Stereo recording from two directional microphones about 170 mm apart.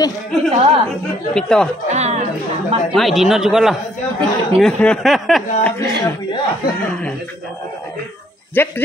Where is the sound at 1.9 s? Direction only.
40° right (ahead or behind).